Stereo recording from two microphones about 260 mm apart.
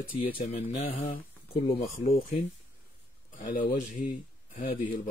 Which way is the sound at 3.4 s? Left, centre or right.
Left.